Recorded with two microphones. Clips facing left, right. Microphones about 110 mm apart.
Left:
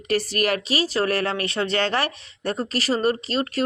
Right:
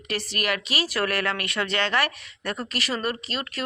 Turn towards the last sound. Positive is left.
turn(degrees=35)  # may be behind; listen again after turning